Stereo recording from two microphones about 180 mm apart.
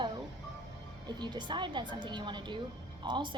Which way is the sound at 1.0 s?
25° right (ahead or behind).